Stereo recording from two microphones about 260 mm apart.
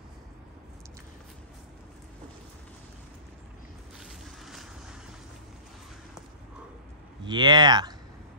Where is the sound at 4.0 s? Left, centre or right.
Centre.